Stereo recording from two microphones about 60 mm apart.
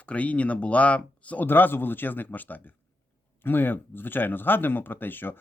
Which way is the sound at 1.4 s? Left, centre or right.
Left.